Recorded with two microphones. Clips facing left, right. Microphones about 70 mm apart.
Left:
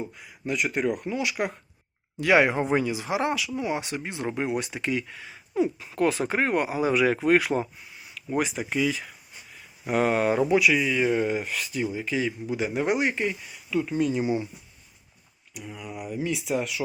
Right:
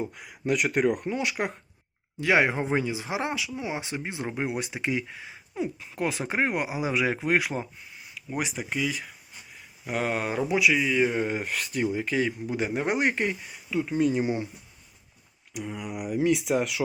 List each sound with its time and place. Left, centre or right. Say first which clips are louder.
0.1 s speech: right 3 dB; right
1.0 s a man's voice: left 1 dB; right
2.2 s speech: left 3 dB; right
5.5 s speech: left 6 dB; centre
11.0 s speech: left 1 dB; centre
11.3 s a man's voice: left 2 dB; right
12.7 s speech: left 3 dB; right
13.0 s speech: even; right
13.7 s speech: even; right
16.0 s speech: right 5 dB; right